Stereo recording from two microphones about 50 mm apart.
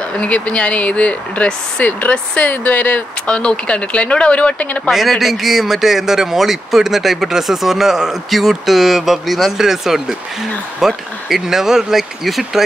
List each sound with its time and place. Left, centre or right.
0.2 s a woman's voice: left
3.3 s speech: left
4.9 s a man's voice: centre